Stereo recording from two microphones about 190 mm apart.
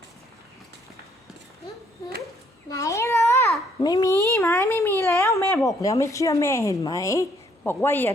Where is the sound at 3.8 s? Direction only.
20° left (ahead or behind).